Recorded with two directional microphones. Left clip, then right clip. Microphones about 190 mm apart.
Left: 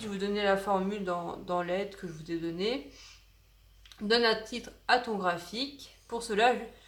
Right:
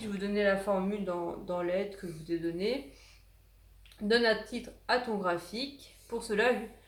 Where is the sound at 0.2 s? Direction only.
55° left (ahead or behind).